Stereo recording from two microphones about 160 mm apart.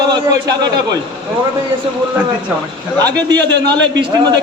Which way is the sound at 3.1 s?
25° right (ahead or behind).